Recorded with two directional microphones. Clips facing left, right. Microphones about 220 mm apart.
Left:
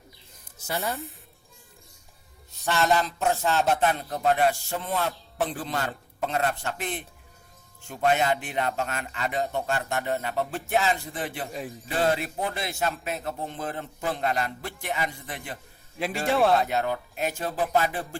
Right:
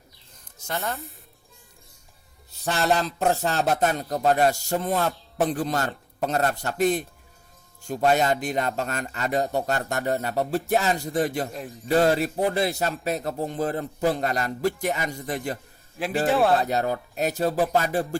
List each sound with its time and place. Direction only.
0.8 s a man's voice: centre (ahead or behind)
3.0 s a man's voice: 40° right (ahead or behind)
16.0 s a man's voice: centre (ahead or behind)
16.6 s a man's voice: 40° right (ahead or behind)